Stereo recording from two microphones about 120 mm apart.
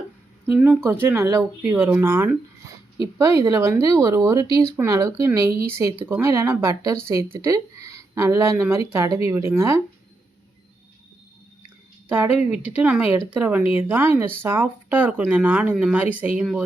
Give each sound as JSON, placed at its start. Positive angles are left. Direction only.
{"t": 0.5, "sound": "speech", "side_deg": -15}
{"t": 12.0, "sound": "speech", "side_deg": -15}